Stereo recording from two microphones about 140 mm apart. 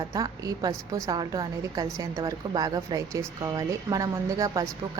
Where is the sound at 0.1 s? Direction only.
25° right (ahead or behind).